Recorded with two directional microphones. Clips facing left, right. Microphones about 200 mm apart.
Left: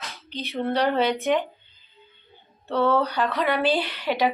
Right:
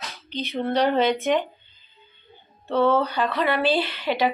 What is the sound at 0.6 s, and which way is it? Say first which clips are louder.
Speech: right 1 dB; 5° left (ahead or behind).